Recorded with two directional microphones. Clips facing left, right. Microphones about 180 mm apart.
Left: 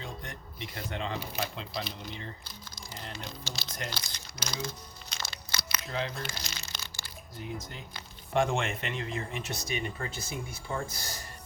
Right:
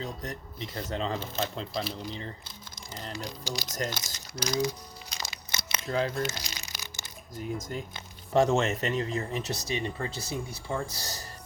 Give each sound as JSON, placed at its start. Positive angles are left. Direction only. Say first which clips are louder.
{"t": 0.0, "sound": "speech", "louder": "right 5 dB", "side_deg": -40}
{"t": 1.2, "sound": "speech", "louder": "right 3 dB", "side_deg": 10}
{"t": 1.5, "sound": "speech", "louder": "right 4 dB", "side_deg": -35}
{"t": 3.9, "sound": "speech", "louder": "right 4 dB", "side_deg": -20}
{"t": 5.1, "sound": "a sound", "louder": "even", "side_deg": -10}
{"t": 5.5, "sound": "crumpling", "louder": "right 1 dB", "side_deg": -25}
{"t": 5.8, "sound": "speech", "louder": "right 7 dB", "side_deg": -40}
{"t": 6.2, "sound": "crushing", "louder": "right 5 dB", "side_deg": -15}
{"t": 8.3, "sound": "speech", "louder": "right 5 dB", "side_deg": -40}